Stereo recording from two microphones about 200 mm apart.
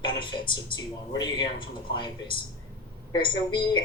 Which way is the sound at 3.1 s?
25° left (ahead or behind).